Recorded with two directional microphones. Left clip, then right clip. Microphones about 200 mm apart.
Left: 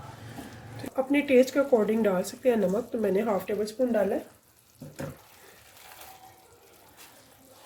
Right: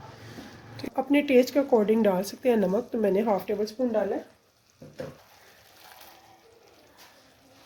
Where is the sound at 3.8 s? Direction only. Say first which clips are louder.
Left 4 dB; 20° right (ahead or behind).